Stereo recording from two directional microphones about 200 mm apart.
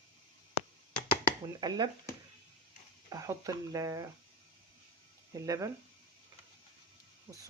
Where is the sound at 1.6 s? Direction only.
20° right (ahead or behind).